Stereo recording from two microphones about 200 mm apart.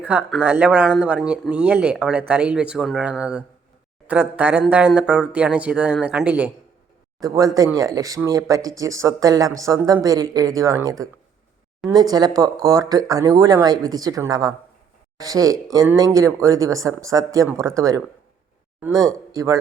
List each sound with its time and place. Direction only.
0.0 s speech: 5° right (ahead or behind)
7.2 s speech: 15° right (ahead or behind)